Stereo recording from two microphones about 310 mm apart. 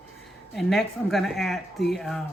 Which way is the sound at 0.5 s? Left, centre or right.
Centre.